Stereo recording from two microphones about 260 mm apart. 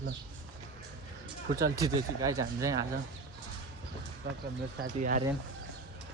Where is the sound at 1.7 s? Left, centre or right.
Centre.